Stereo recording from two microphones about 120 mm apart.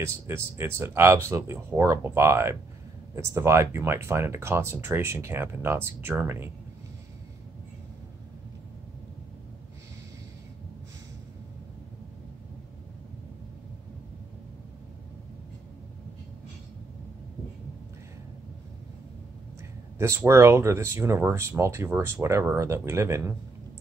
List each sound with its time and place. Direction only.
0.0 s speech: 20° right (ahead or behind)
20.0 s speech: 25° right (ahead or behind)